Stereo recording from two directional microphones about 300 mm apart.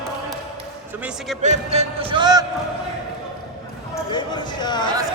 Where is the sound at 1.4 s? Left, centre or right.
Right.